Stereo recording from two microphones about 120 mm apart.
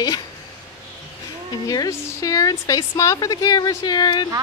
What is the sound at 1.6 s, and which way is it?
A woman's voice, 30° left (ahead or behind).